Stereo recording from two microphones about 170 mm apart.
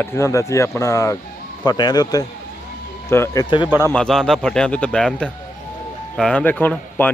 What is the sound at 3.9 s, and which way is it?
A man's voice, 5° left (ahead or behind).